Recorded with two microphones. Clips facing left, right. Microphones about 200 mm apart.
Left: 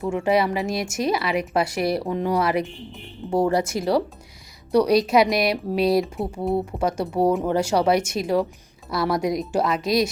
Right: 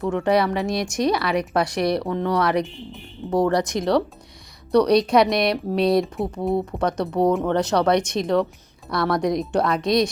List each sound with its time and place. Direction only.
0.0 s speech: 10° left (ahead or behind)